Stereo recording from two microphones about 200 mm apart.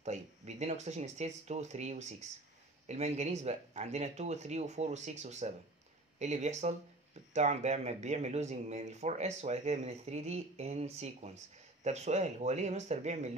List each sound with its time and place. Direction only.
0.0 s speech: 35° right (ahead or behind)